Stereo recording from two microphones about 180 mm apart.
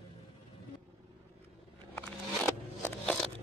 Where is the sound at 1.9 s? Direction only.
10° left (ahead or behind).